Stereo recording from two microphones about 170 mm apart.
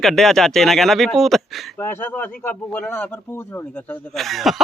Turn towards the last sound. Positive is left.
turn(degrees=0)  # may be behind; listen again after turning